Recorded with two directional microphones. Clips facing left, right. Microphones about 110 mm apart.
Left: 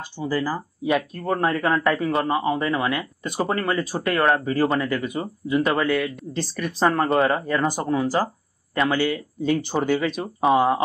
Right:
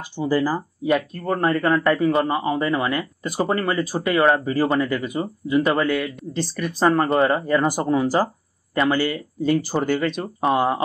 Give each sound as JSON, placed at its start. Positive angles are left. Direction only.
{"t": 0.2, "sound": "speech", "side_deg": -15}
{"t": 0.8, "sound": "a man's voice", "side_deg": 0}
{"t": 7.6, "sound": "speech", "side_deg": -15}
{"t": 8.7, "sound": "a man's voice", "side_deg": 0}